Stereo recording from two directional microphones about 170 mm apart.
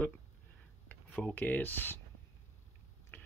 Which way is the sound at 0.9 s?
5° left (ahead or behind).